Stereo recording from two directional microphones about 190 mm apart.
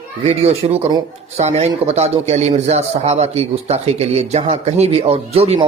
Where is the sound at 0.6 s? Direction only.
30° right (ahead or behind).